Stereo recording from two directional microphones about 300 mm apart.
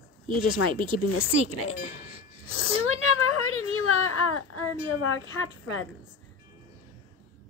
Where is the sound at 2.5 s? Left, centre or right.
Left.